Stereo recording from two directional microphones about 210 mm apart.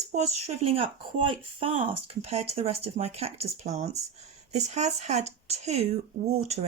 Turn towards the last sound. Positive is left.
turn(degrees=-30)  # may be behind; listen again after turning